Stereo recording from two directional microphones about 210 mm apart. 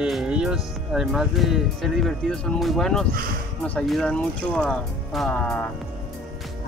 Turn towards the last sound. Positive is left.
turn(degrees=5)  # may be behind; listen again after turning